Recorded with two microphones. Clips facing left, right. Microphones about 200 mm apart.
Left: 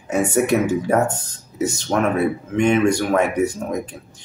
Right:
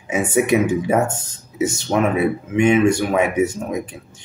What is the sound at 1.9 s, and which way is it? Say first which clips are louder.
Speech: right 1 dB; 5° right (ahead or behind).